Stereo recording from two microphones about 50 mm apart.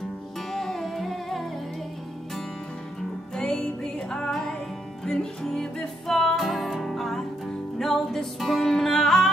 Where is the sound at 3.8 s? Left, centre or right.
Centre.